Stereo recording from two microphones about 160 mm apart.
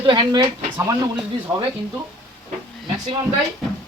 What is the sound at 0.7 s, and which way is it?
Speech, 20° right (ahead or behind).